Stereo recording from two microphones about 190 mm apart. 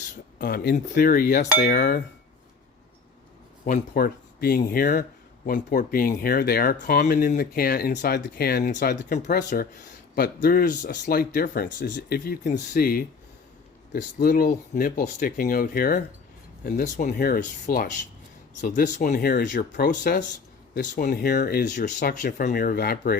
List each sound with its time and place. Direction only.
0.3 s speech: 50° left (ahead or behind)
3.7 s speech: 50° left (ahead or behind)